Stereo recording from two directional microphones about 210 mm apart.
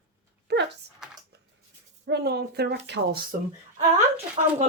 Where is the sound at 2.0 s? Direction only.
50° right (ahead or behind).